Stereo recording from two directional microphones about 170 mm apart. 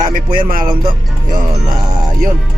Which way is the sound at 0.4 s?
55° right (ahead or behind).